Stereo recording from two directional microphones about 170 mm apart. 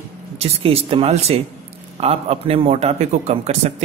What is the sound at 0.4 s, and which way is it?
Speech, 35° right (ahead or behind).